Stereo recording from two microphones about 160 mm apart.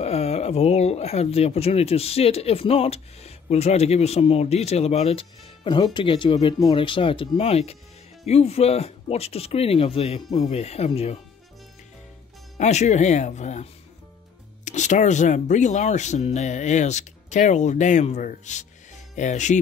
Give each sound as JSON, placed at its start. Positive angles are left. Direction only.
{"t": 0.0, "sound": "speech", "side_deg": 40}
{"t": 12.5, "sound": "speech", "side_deg": 45}